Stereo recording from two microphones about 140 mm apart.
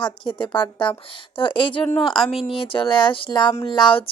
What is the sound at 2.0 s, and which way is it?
Speech, centre (ahead or behind).